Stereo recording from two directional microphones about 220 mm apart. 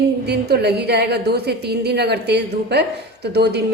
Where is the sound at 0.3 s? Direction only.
45° right (ahead or behind).